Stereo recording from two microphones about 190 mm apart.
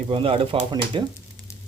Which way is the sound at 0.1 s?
30° right (ahead or behind).